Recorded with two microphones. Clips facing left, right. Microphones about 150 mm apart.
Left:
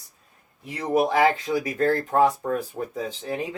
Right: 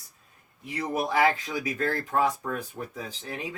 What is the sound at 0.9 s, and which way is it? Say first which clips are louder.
Speech: left 5 dB; 25° left (ahead or behind).